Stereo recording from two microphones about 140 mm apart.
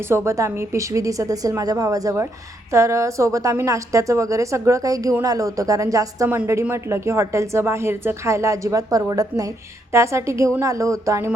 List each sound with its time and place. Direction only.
0.1 s a woman's voice: 20° right (ahead or behind)